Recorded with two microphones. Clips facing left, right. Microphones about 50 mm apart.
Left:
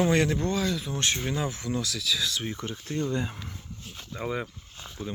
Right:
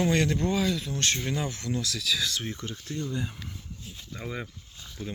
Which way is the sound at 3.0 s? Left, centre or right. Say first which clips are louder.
Left 4 dB; left.